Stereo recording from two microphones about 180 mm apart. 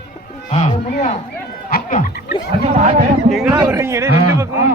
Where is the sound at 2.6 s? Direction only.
40° right (ahead or behind).